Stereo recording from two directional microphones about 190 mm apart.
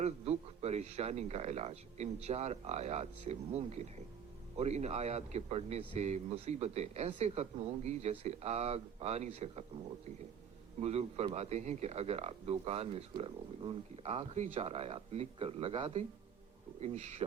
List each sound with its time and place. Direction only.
0.0 s a man's voice: 35° right (ahead or behind)
10.8 s a man's voice: 35° right (ahead or behind)